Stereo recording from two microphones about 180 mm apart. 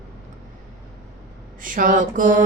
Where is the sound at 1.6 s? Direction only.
50° right (ahead or behind).